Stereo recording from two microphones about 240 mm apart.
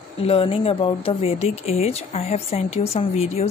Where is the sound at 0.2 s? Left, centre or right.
Left.